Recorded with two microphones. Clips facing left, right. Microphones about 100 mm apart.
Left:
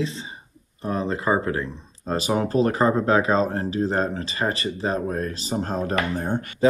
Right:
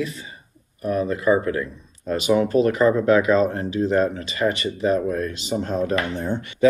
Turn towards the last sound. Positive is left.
turn(degrees=45)  # may be behind; listen again after turning